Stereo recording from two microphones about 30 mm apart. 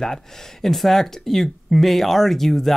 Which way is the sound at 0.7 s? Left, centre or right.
Centre.